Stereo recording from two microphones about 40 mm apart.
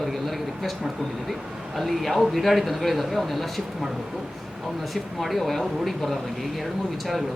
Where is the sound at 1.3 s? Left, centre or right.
Centre.